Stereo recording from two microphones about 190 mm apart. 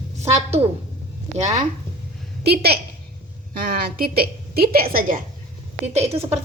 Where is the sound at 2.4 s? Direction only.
55° right (ahead or behind).